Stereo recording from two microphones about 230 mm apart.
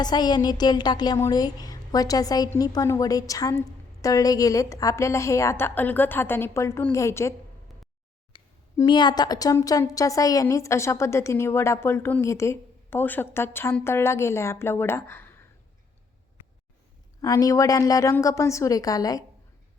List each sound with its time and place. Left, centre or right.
0.0 s a woman's voice: centre
17.2 s a woman's voice: centre